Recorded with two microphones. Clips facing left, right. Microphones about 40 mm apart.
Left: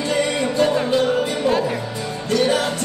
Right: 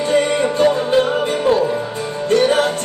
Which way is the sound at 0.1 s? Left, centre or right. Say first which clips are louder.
Right 5 dB; right.